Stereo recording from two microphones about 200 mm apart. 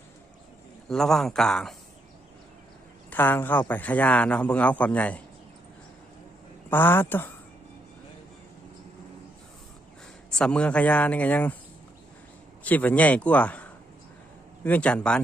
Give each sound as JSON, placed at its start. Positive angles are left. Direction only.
{"t": 0.9, "sound": "a man's voice", "side_deg": 0}
{"t": 3.1, "sound": "speech", "side_deg": 10}
{"t": 6.7, "sound": "speech", "side_deg": 10}
{"t": 10.3, "sound": "speech", "side_deg": 5}
{"t": 12.6, "sound": "speech", "side_deg": 10}